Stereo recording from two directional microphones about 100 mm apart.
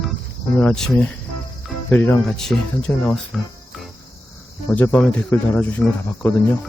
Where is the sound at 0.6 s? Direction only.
5° left (ahead or behind).